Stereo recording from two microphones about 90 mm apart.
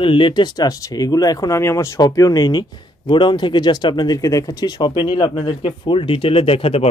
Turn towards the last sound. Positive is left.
turn(degrees=90)